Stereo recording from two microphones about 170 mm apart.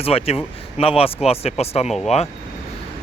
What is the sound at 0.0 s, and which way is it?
Speech, 35° left (ahead or behind).